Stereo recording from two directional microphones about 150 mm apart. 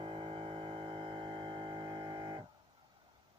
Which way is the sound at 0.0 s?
35° right (ahead or behind).